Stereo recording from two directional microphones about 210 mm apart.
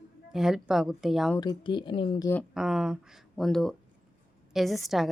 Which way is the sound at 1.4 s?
20° left (ahead or behind).